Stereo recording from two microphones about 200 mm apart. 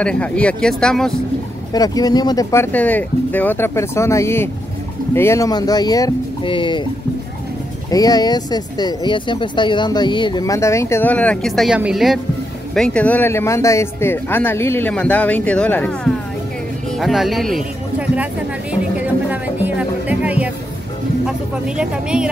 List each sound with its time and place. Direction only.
0.0 s speech: 5° left (ahead or behind)
1.7 s speech: 20° left (ahead or behind)
7.9 s speech: 20° left (ahead or behind); by 22.3 s 5° right (ahead or behind)